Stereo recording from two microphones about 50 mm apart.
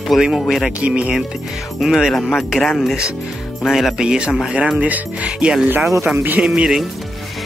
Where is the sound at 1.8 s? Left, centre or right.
Centre.